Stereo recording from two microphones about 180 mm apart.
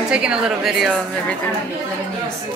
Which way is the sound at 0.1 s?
5° right (ahead or behind).